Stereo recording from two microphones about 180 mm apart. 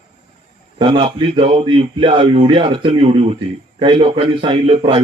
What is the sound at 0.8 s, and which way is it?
A man's voice, 30° right (ahead or behind).